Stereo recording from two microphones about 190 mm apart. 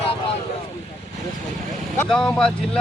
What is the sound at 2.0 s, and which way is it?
Speech, 5° left (ahead or behind).